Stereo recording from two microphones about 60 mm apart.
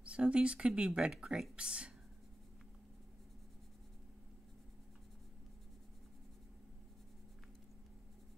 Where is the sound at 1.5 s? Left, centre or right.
Centre.